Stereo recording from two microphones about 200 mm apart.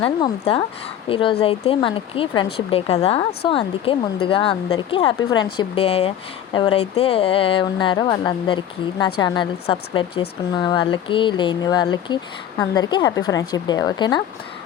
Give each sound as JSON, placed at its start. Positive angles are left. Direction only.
{"t": 0.0, "sound": "speech", "side_deg": 30}